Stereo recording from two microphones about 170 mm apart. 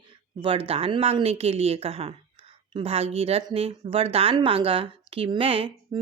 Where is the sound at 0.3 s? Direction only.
30° right (ahead or behind).